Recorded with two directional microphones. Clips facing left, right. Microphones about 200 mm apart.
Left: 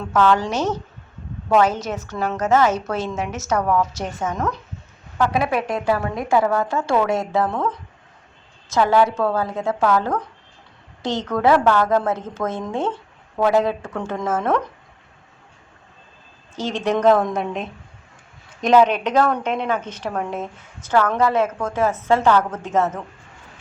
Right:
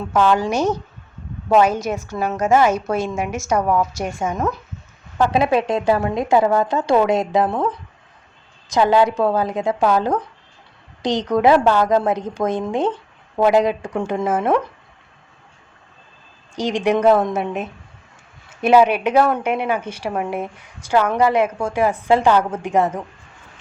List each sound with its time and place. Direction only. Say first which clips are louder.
0.1 s a woman's voice: right 1 dB; 10° right (ahead or behind)
5.1 s a woman's voice: right 3 dB; 25° right (ahead or behind)
8.7 s a woman's voice: right 2 dB; 15° right (ahead or behind)
16.6 s a woman's voice: right 3 dB; 15° right (ahead or behind)